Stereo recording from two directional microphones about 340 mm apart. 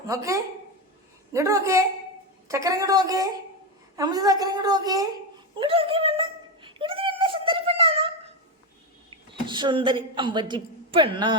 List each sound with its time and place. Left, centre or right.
0.1 s a woman's voice: centre
5.5 s a sound: centre
9.5 s a woman's voice: centre